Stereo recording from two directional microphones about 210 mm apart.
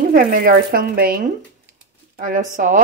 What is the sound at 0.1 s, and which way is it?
A woman's voice, 45° right (ahead or behind).